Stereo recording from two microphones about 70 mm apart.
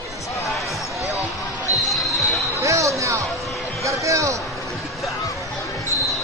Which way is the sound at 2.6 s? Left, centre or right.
Right.